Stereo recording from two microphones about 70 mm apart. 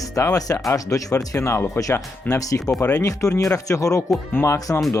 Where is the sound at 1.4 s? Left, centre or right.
Left.